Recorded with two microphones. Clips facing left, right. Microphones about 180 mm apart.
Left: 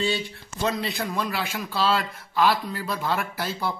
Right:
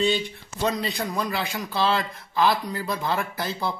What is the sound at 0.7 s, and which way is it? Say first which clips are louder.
Speech: right 1 dB; centre (ahead or behind).